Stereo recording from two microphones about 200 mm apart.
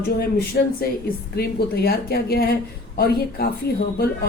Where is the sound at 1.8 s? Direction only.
50° left (ahead or behind).